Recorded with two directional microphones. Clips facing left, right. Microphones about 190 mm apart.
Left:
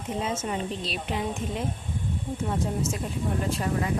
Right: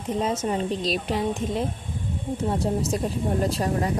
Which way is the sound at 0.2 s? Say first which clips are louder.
Right 5 dB; 40° right (ahead or behind).